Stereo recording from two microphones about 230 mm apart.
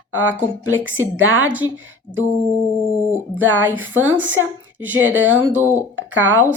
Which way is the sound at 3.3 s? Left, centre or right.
Centre.